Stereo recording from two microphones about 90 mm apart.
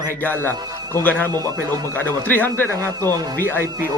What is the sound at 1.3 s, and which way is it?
Speech, 45° right (ahead or behind).